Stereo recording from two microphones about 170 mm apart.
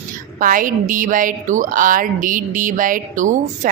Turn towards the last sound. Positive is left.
turn(degrees=-50)  # may be behind; listen again after turning